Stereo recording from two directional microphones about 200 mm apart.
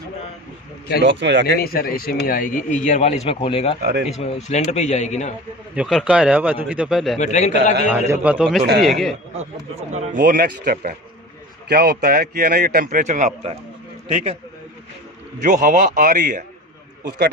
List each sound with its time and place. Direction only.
1.0 s speech: 65° right (ahead or behind)
1.6 s speech: 50° left (ahead or behind); by 3.8 s 25° left (ahead or behind)
3.8 s speech: 55° right (ahead or behind)
4.1 s speech: 30° left (ahead or behind)
5.7 s speech: 5° right (ahead or behind)
7.2 s speech: 35° left (ahead or behind)
7.9 s a man's voice: 10° right (ahead or behind)
9.9 s a man's voice: 35° right (ahead or behind)
15.4 s a man's voice: 40° right (ahead or behind)
17.0 s speech: 55° right (ahead or behind)